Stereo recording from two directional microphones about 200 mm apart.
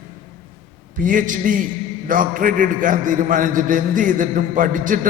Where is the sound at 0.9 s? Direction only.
40° right (ahead or behind).